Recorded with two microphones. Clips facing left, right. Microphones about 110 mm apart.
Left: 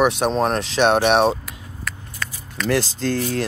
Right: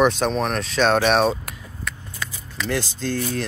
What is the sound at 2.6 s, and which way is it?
Speech, 90° left.